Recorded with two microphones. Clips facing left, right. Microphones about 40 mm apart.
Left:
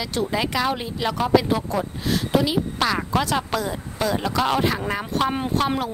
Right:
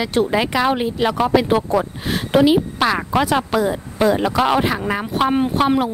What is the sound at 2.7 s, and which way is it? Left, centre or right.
A woman's voice, centre.